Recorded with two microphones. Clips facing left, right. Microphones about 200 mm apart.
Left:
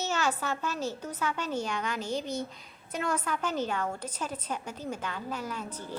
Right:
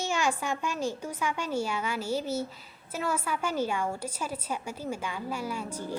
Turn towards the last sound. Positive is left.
turn(degrees=-10)  # may be behind; listen again after turning